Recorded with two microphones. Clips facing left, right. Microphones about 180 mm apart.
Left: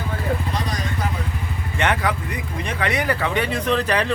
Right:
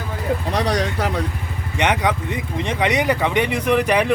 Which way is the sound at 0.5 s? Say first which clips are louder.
Right 6 dB; 75° right (ahead or behind).